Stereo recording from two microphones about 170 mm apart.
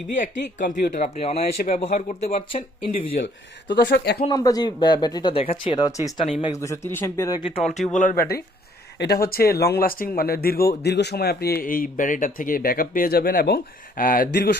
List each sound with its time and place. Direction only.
0.2 s speech: 50° left (ahead or behind)
1.4 s speech: 55° left (ahead or behind); by 2.6 s 35° left (ahead or behind)
3.7 s speech: 80° left
4.2 s speech: 20° left (ahead or behind)
7.5 s speech: 40° left (ahead or behind)
7.9 s speech: 55° left (ahead or behind)